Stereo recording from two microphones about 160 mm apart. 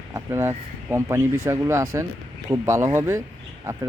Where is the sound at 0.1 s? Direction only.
15° right (ahead or behind).